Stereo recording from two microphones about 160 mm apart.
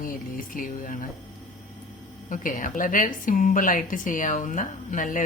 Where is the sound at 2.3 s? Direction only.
55° left (ahead or behind).